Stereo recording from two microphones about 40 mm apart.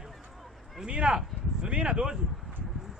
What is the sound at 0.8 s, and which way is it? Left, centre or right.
Speech, right.